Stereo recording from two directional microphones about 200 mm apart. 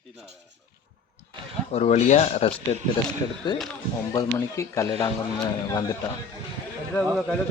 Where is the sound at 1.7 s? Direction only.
30° left (ahead or behind); by 4.9 s 15° left (ahead or behind).